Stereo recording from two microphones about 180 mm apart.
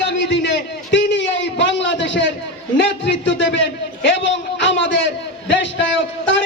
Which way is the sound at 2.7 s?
75° left (ahead or behind).